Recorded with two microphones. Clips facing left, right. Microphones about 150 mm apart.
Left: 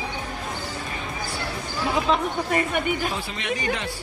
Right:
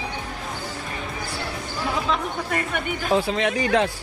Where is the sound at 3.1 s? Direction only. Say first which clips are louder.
Right 8 dB; 90° right.